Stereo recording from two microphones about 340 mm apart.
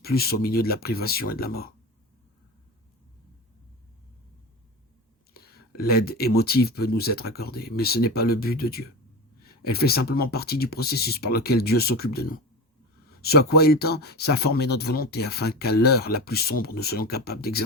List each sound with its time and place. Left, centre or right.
0.0 s speech: left
5.3 s speech: left